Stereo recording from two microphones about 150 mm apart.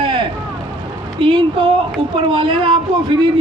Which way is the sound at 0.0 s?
35° right (ahead or behind).